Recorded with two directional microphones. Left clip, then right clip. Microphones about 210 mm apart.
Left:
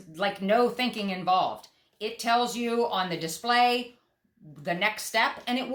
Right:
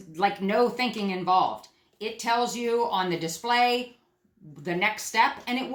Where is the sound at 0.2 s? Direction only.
20° left (ahead or behind).